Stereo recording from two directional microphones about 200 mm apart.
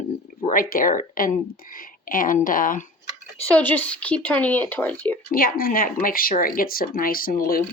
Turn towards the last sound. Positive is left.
turn(degrees=50)  # may be behind; listen again after turning